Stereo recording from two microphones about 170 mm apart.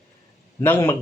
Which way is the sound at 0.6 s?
15° left (ahead or behind).